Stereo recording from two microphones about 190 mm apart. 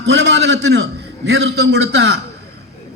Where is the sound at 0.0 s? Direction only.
65° right (ahead or behind).